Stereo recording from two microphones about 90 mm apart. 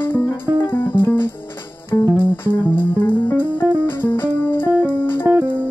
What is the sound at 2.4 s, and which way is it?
Music, 25° left (ahead or behind).